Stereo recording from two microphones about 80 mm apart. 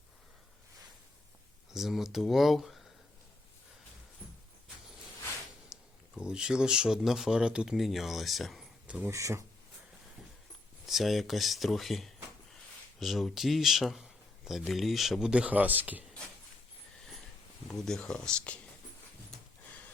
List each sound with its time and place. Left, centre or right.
1.7 s speech: centre
5.6 s speech: centre
9.0 s speech: right
10.8 s speech: centre
15.3 s speech: centre
17.8 s speech: centre